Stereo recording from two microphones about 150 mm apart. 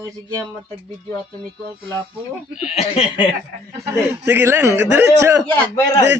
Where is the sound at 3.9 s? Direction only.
15° right (ahead or behind).